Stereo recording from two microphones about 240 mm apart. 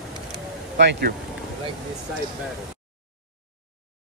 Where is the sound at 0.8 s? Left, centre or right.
Right.